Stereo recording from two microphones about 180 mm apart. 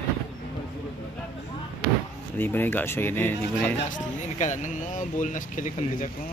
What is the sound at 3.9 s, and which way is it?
Speech, 40° left (ahead or behind).